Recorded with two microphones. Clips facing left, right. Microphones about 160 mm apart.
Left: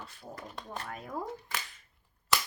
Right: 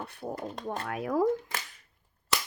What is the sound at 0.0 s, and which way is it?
Speech, 60° right (ahead or behind).